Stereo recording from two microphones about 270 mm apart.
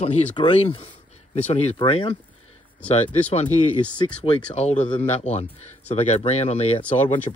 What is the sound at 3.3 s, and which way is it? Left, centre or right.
Speech, left.